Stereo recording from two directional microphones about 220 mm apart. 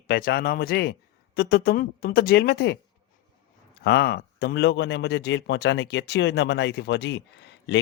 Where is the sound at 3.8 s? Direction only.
50° left (ahead or behind).